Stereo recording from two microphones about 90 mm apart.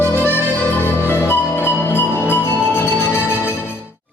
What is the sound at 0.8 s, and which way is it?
Music, 25° left (ahead or behind).